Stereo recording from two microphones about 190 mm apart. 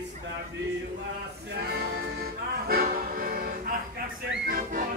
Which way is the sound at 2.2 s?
50° right (ahead or behind).